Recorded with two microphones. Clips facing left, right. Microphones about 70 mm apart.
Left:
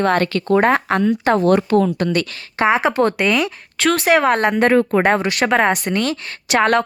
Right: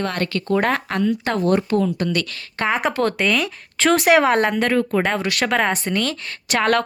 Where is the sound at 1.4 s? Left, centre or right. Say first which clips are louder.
Left 1 dB; left.